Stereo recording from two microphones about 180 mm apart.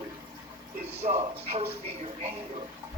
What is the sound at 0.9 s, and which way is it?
Speech, 35° right (ahead or behind).